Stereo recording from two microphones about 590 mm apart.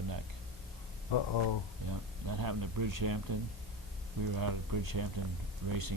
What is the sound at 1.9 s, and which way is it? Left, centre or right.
Speech, right.